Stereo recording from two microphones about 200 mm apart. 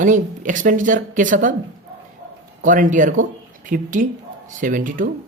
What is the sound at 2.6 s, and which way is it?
A woman's voice, 40° right (ahead or behind).